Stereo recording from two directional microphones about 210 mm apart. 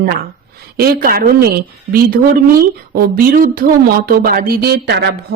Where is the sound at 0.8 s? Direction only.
45° right (ahead or behind).